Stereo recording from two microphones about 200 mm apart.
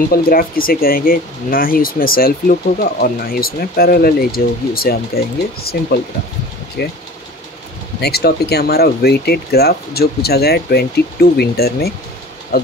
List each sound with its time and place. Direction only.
0.1 s speech: 45° left (ahead or behind)
8.0 s speech: 50° left (ahead or behind)